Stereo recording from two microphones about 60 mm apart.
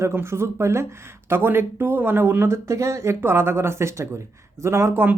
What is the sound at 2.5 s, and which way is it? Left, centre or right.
Speech, right.